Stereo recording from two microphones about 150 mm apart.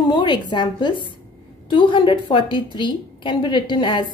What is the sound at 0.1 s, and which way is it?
A woman's voice, 30° left (ahead or behind).